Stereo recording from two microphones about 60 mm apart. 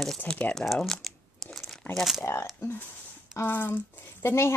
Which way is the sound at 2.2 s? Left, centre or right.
Left.